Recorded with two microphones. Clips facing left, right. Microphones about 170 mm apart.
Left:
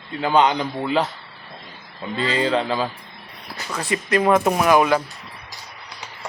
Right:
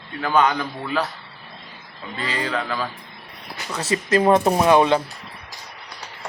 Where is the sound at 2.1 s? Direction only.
25° left (ahead or behind).